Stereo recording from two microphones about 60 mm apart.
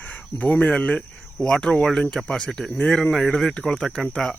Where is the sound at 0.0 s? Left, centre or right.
Left.